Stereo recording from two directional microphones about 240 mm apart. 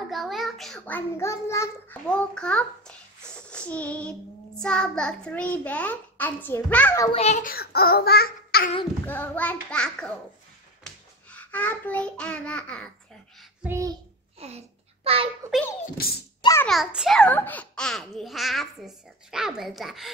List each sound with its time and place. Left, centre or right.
0.1 s a child's voice: centre
7.1 s a child's voice: left
9.0 s a child's voice: centre
13.4 s child singing: centre
14.4 s a child's voice: right
15.8 s a child's voice: left
16.3 s a sound: centre
16.6 s a child's voice: centre